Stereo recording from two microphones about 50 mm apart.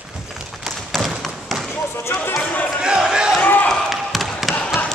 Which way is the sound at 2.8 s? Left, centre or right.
Centre.